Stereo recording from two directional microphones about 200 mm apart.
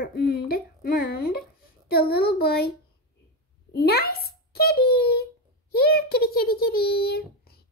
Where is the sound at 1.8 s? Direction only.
50° left (ahead or behind).